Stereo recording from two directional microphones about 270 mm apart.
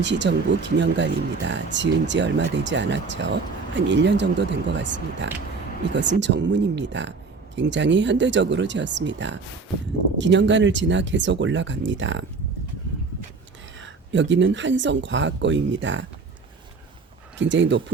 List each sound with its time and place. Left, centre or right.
0.0 s speech: right
13.7 s speech: right
17.3 s speech: right